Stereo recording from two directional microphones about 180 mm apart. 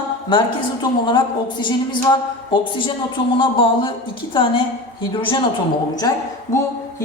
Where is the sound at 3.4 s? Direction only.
30° left (ahead or behind).